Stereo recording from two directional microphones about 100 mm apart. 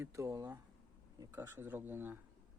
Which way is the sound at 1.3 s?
20° right (ahead or behind).